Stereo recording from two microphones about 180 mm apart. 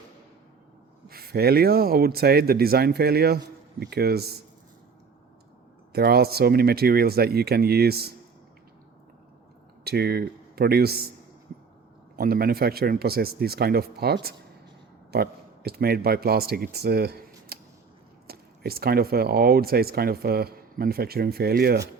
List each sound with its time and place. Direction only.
1.0 s speech: 55° right (ahead or behind)
5.9 s speech: 60° right (ahead or behind)
9.8 s speech: 60° right (ahead or behind)
12.1 s speech: 55° right (ahead or behind)